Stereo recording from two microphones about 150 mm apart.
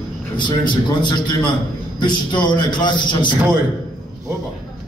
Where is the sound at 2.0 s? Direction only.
30° left (ahead or behind).